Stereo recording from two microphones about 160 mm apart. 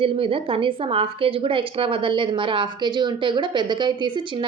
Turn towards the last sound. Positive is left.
turn(degrees=-30)  # may be behind; listen again after turning